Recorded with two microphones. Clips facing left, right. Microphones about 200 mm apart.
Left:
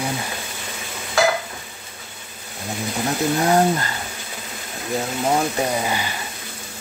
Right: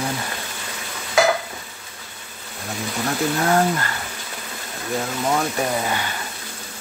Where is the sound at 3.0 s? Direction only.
20° left (ahead or behind).